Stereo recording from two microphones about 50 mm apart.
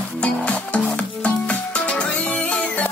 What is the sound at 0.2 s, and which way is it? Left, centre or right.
Music, left.